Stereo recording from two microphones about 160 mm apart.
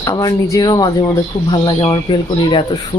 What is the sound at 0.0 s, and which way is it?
Speech, 25° left (ahead or behind).